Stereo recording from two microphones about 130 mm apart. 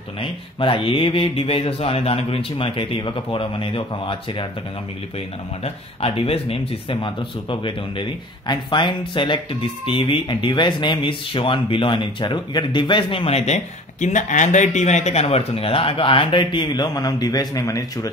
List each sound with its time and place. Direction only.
0.2 s speech: 40° left (ahead or behind)
5.6 s speech: 50° left (ahead or behind); by 18.1 s 25° left (ahead or behind)